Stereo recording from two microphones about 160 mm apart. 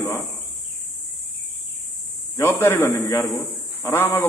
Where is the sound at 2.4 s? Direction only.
15° left (ahead or behind).